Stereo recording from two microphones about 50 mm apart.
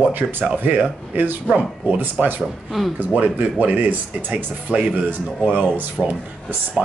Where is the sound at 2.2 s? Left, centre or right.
Right.